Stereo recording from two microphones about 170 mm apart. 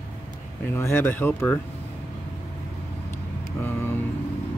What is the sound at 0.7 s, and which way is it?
Speech, 15° left (ahead or behind).